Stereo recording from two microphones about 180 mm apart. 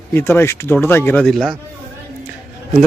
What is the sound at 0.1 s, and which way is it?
Speech, 15° left (ahead or behind).